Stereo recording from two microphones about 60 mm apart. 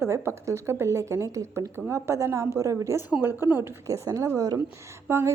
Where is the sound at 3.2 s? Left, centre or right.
Right.